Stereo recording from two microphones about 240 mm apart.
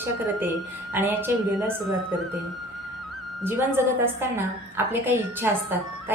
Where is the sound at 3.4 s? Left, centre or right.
Centre.